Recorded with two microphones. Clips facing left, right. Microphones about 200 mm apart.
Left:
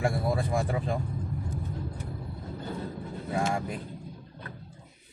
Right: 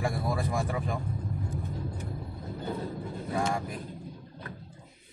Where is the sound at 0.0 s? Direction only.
25° left (ahead or behind).